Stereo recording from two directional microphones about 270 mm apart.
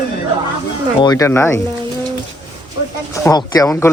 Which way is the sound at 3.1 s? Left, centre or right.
Centre.